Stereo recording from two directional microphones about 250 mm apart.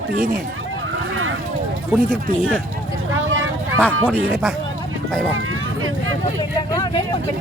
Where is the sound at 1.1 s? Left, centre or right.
Right.